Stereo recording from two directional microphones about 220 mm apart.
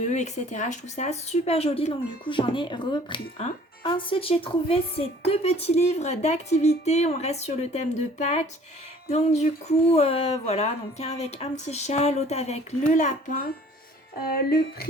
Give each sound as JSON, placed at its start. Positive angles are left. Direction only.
{"t": 0.0, "sound": "a woman's voice", "side_deg": 30}
{"t": 14.2, "sound": "music", "side_deg": 45}